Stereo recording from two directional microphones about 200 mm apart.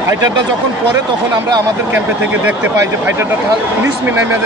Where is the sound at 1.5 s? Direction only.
10° right (ahead or behind).